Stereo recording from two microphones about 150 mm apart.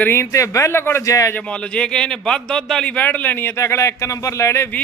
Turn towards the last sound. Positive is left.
turn(degrees=15)  # may be behind; listen again after turning